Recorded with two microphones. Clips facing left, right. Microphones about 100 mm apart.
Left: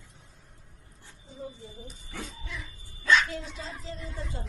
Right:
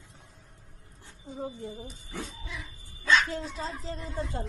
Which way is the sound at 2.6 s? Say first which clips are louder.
Even; 20° right (ahead or behind).